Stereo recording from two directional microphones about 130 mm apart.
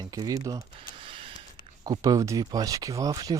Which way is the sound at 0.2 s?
25° right (ahead or behind).